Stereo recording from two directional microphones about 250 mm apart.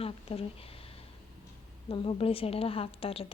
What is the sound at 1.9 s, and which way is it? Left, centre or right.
A woman's voice, left.